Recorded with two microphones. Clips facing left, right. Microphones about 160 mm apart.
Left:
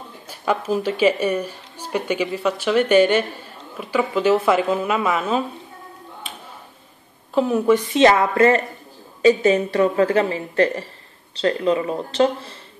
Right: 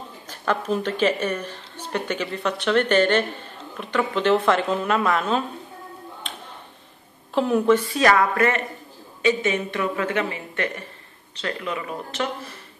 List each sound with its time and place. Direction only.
0.3 s speech: 5° left (ahead or behind)
6.2 s music: 5° left (ahead or behind)
7.3 s a woman's voice: centre (ahead or behind)
7.7 s speech: 25° left (ahead or behind)